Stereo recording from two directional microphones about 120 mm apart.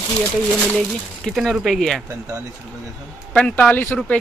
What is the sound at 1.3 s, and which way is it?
Speech, centre (ahead or behind).